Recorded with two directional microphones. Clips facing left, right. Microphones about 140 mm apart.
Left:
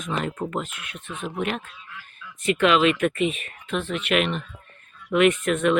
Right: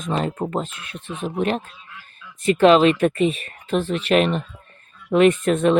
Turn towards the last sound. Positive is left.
turn(degrees=-35)  # may be behind; listen again after turning